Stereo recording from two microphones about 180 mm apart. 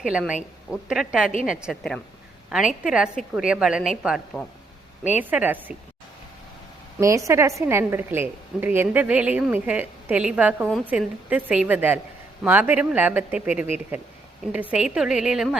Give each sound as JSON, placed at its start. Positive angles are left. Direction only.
{"t": 0.0, "sound": "a woman's voice", "side_deg": -5}
{"t": 7.0, "sound": "a woman's voice", "side_deg": -15}